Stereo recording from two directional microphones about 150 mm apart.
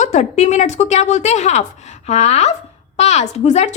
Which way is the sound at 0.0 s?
50° left (ahead or behind).